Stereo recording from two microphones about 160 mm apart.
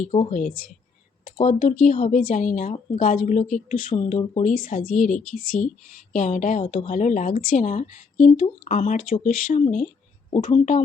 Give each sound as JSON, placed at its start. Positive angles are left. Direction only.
{"t": 0.0, "sound": "a woman's voice", "side_deg": 45}
{"t": 1.5, "sound": "a woman's voice", "side_deg": 50}
{"t": 3.9, "sound": "a woman's voice", "side_deg": 40}
{"t": 4.5, "sound": "a woman's voice", "side_deg": 60}